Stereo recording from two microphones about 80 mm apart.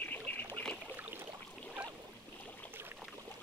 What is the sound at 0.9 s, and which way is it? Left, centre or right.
Boat, right.